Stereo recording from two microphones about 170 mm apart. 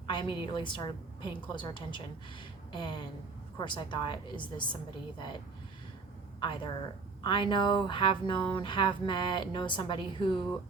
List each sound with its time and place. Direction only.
0.1 s speech: 30° left (ahead or behind)
6.4 s speech: 30° left (ahead or behind)